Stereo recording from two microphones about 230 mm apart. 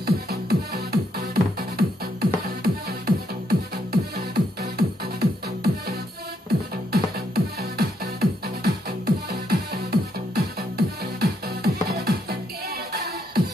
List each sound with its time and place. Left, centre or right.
0.0 s music: right